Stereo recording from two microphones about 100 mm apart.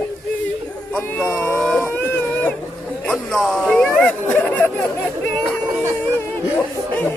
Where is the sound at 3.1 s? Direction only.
5° left (ahead or behind).